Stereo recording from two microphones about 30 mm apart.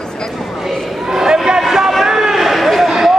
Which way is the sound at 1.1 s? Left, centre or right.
Centre.